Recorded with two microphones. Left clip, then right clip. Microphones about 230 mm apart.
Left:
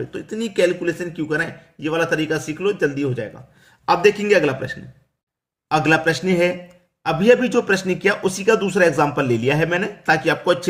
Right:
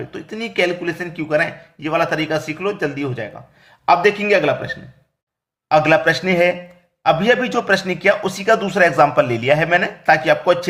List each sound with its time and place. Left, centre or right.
0.1 s a man's voice: centre